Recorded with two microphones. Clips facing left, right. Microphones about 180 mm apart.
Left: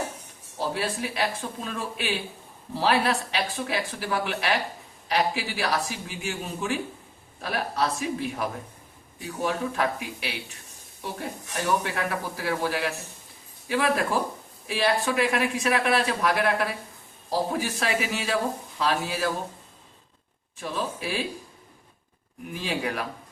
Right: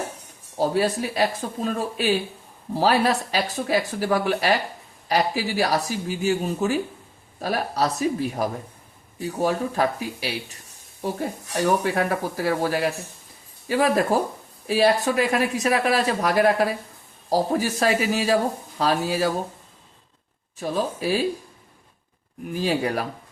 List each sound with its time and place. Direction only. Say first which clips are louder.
0.6 s speech: right 7 dB; 40° right (ahead or behind)
11.6 s speech: right 5 dB; 40° right (ahead or behind)
20.6 s speech: right 6 dB; 40° right (ahead or behind)
22.5 s speech: right 6 dB; 40° right (ahead or behind)